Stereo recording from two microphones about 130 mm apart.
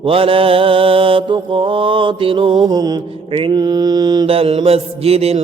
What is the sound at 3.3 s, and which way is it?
Mantra, 40° right (ahead or behind).